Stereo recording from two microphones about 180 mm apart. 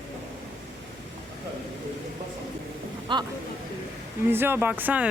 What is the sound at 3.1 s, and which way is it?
Speech, 25° right (ahead or behind).